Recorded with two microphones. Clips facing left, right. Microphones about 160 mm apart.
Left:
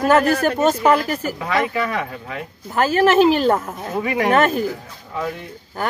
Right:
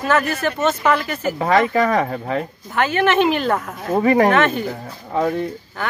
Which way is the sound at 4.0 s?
40° right (ahead or behind).